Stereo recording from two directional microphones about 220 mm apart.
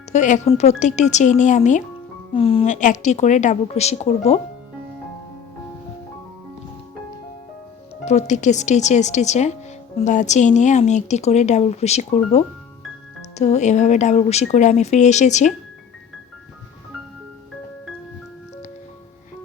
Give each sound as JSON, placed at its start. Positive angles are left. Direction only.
{"t": 0.1, "sound": "speech", "side_deg": 35}
{"t": 8.0, "sound": "speech", "side_deg": 30}